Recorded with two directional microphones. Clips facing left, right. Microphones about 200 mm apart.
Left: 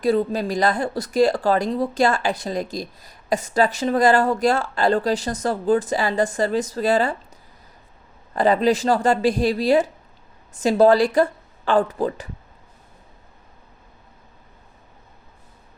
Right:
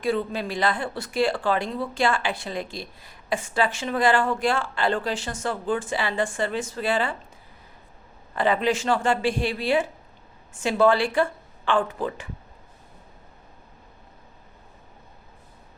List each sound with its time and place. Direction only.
0.0 s speech: 40° left (ahead or behind)
8.4 s speech: 40° left (ahead or behind)